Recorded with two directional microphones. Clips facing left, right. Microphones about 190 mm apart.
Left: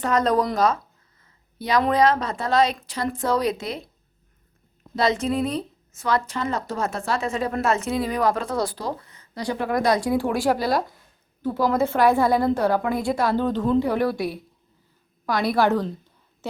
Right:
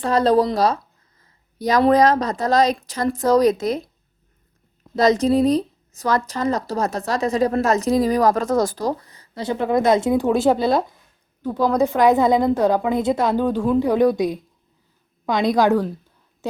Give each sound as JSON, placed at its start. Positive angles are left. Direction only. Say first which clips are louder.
{"t": 0.0, "sound": "a woman's voice", "louder": "right 4 dB", "side_deg": -30}
{"t": 4.9, "sound": "a woman's voice", "louder": "right 6 dB", "side_deg": -40}
{"t": 9.4, "sound": "a woman's voice", "louder": "right 4 dB", "side_deg": -20}